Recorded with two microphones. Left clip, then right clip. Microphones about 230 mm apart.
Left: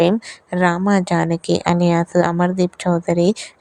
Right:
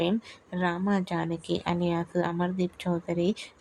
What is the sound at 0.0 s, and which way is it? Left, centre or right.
Speech, left.